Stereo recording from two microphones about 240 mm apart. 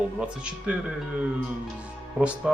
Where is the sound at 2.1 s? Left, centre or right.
Centre.